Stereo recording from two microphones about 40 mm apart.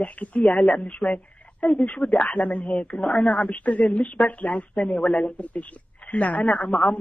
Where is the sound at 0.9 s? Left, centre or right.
Left.